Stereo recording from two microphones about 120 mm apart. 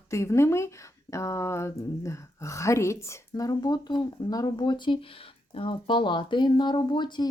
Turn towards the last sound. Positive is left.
turn(degrees=40)  # may be behind; listen again after turning